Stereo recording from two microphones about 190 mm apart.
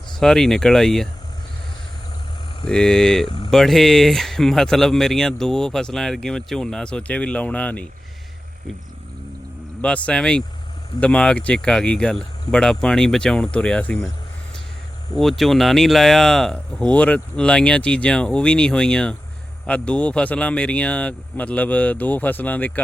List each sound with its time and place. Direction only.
0.2 s speech: centre (ahead or behind)
2.6 s speech: 5° left (ahead or behind)
3.2 s vehicle: 25° left (ahead or behind)
3.5 s speech: centre (ahead or behind)
9.8 s speech: 5° left (ahead or behind)
15.1 s speech: centre (ahead or behind)